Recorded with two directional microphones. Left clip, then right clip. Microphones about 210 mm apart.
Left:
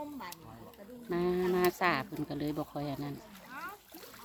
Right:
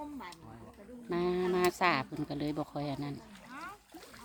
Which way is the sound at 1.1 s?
10° right (ahead or behind).